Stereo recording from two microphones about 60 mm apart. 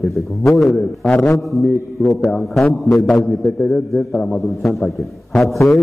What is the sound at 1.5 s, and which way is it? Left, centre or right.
A man's voice, centre.